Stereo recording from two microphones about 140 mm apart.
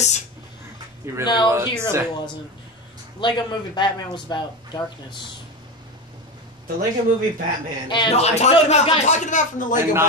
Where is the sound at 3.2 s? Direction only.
35° left (ahead or behind).